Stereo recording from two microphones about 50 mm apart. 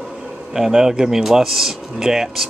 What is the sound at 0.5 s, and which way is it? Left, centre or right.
Speech, centre.